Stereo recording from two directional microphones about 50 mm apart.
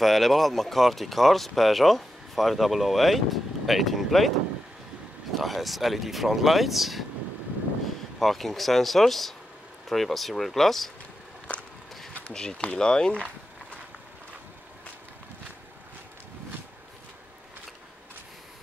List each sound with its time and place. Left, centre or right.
0.0 s speech: centre
5.4 s speech: centre
8.2 s speech: centre
12.4 s speech: centre